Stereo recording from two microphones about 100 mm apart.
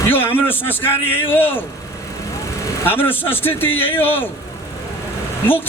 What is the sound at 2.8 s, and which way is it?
A man's voice, 20° left (ahead or behind).